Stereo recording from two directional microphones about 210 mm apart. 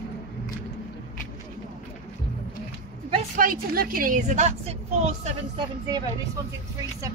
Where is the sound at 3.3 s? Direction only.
40° right (ahead or behind).